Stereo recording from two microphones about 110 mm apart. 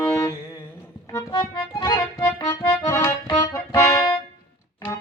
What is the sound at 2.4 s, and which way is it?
Accordion, 30° left (ahead or behind).